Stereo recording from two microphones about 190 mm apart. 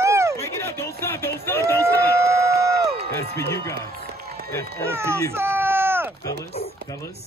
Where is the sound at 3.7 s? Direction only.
55° right (ahead or behind).